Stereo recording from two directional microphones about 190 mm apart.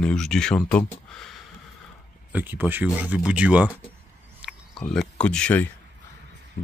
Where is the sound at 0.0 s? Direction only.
5° left (ahead or behind).